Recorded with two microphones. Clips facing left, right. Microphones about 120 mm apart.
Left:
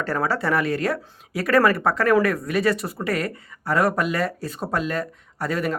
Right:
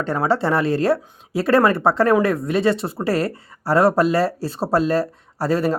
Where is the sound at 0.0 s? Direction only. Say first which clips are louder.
Right 4 dB; 20° right (ahead or behind).